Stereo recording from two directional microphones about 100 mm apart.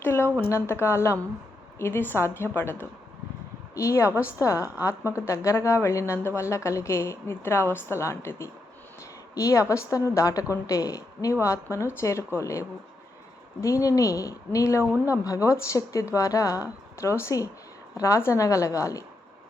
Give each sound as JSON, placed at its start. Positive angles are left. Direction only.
{"t": 0.0, "sound": "a woman's voice", "side_deg": 25}